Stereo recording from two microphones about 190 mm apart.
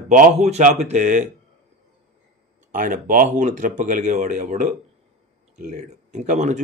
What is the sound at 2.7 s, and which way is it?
Speech, 45° right (ahead or behind).